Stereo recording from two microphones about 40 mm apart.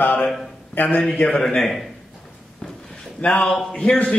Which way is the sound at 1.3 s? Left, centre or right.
Centre.